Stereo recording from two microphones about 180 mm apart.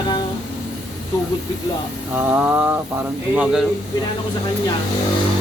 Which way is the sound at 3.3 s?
5° right (ahead or behind).